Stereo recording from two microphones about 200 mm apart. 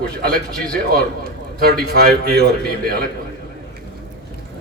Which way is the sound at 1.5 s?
50° right (ahead or behind).